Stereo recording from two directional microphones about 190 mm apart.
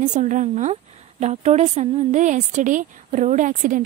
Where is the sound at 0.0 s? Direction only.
40° right (ahead or behind).